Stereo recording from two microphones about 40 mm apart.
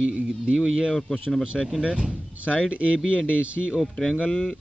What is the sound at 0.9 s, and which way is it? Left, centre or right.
Speech, centre.